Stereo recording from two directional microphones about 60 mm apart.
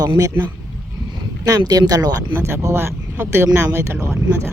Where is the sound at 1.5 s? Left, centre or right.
Right.